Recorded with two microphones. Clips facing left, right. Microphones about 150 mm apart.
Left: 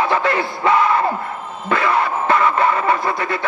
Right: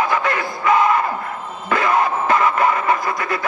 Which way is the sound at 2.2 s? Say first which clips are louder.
Left 3 dB; 30° left (ahead or behind).